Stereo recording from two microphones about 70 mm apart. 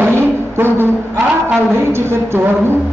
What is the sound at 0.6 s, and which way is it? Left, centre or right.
A woman's voice, right.